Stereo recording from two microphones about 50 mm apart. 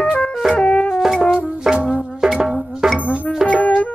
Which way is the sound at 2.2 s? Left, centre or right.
Centre.